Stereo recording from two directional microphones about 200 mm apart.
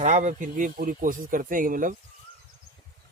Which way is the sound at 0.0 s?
35° right (ahead or behind).